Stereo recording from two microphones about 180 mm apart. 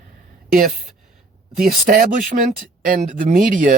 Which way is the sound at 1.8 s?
50° right (ahead or behind).